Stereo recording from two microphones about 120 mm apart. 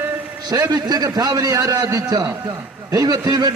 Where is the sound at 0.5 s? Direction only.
35° right (ahead or behind).